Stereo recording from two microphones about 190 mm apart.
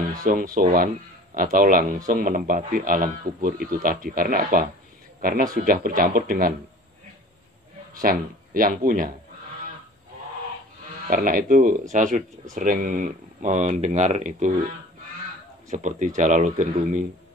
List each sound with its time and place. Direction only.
0.2 s speech: 45° right (ahead or behind)
7.9 s speech: 45° right (ahead or behind)
11.1 s speech: 45° right (ahead or behind)
15.7 s speech: 40° right (ahead or behind)